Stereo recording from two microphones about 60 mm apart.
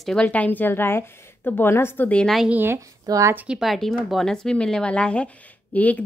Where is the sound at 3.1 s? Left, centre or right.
Right.